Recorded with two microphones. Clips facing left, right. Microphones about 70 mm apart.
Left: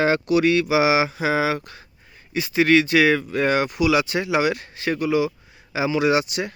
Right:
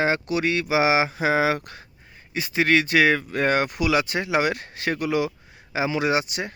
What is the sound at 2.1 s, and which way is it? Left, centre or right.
Speech, right.